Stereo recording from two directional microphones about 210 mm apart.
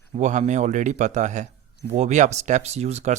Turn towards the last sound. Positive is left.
turn(degrees=-30)  # may be behind; listen again after turning